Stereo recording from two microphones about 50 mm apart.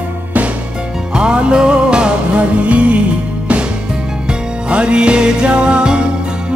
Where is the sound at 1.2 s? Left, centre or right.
Centre.